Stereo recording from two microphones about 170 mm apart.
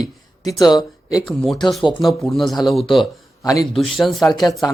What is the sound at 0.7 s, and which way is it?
Speech, 25° left (ahead or behind).